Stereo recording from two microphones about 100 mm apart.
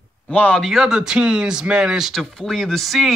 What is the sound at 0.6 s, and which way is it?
Speech, 5° right (ahead or behind).